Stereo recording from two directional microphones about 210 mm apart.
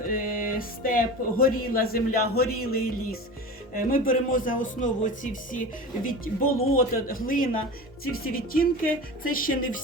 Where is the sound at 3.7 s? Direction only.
40° left (ahead or behind).